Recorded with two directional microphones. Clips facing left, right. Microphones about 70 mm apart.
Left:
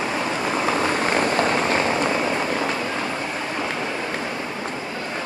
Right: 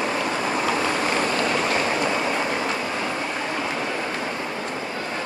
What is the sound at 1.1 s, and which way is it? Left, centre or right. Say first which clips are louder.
Vehicle: left 2 dB; left.